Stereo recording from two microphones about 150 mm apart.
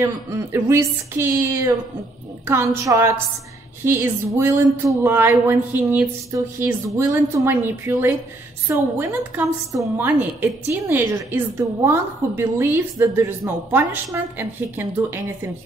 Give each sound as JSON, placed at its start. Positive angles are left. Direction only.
{"t": 0.0, "sound": "a woman's voice", "side_deg": -15}